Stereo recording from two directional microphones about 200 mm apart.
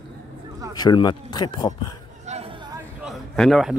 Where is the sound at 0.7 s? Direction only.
20° left (ahead or behind).